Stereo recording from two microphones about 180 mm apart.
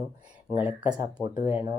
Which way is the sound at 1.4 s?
30° left (ahead or behind).